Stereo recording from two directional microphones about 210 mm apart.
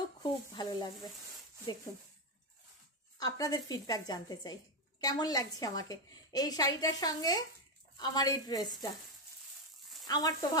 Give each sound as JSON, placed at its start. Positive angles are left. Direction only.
{"t": 0.2, "sound": "a woman's voice", "side_deg": 20}
{"t": 3.2, "sound": "a woman's voice", "side_deg": 15}
{"t": 10.0, "sound": "a woman's voice", "side_deg": 20}